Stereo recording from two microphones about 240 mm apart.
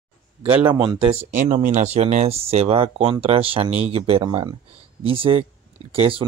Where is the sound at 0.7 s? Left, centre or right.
Centre.